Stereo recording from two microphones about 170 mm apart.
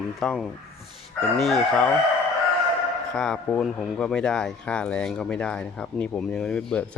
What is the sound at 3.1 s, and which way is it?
Speech, 5° left (ahead or behind).